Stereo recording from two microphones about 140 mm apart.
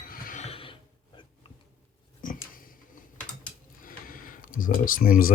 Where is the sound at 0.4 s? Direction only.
40° left (ahead or behind).